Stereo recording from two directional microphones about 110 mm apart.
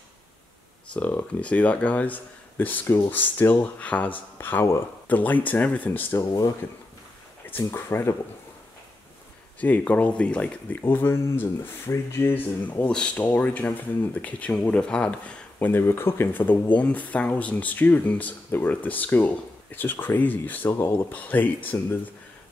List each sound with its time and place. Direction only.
0.9 s speech: 15° left (ahead or behind)
7.5 s speech: 20° left (ahead or behind)
9.6 s speech: 15° left (ahead or behind)